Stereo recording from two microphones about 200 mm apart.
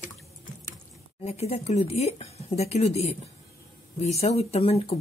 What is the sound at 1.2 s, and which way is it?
Speech, 30° left (ahead or behind).